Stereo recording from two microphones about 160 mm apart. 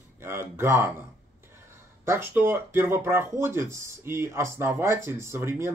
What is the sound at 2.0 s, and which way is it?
Speech, 15° right (ahead or behind).